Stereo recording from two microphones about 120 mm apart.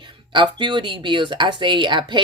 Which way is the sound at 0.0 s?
40° right (ahead or behind).